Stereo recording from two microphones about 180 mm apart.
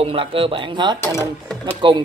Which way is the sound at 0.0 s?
30° right (ahead or behind).